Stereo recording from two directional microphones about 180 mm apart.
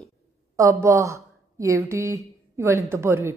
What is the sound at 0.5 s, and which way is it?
A woman's voice, 15° right (ahead or behind).